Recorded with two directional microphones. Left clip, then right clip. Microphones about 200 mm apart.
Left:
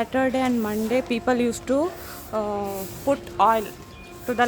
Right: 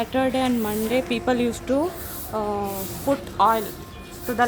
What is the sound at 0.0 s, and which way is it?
A woman's voice, 40° left (ahead or behind).